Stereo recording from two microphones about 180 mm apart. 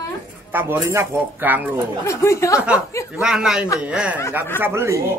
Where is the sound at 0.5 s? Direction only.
15° right (ahead or behind).